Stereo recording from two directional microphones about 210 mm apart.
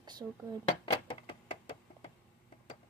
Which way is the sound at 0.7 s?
25° left (ahead or behind).